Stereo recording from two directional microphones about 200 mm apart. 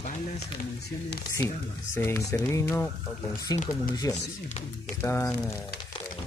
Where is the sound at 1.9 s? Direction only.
15° left (ahead or behind).